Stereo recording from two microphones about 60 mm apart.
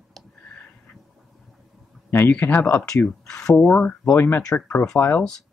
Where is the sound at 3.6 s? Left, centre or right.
Left.